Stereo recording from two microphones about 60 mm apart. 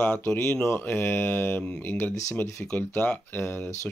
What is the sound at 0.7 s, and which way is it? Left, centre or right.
Speech, left.